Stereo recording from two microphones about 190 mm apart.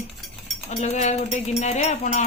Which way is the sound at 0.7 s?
35° left (ahead or behind).